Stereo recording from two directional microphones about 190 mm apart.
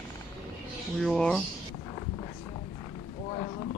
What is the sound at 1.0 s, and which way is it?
Speech, centre (ahead or behind).